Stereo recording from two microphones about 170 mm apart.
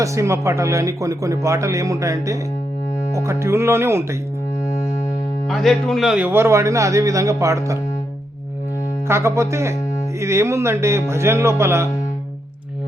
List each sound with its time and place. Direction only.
0.0 s speech: 15° right (ahead or behind)
5.5 s speech: centre (ahead or behind); by 7.8 s 20° right (ahead or behind)
9.0 s speech: 15° right (ahead or behind)